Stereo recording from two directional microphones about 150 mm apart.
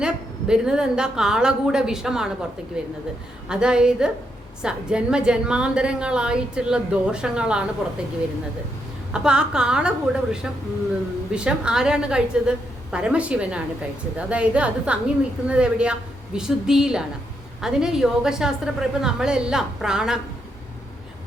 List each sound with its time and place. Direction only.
0.0 s a woman's voice: 5° right (ahead or behind)
9.1 s a woman's voice: 5° right (ahead or behind)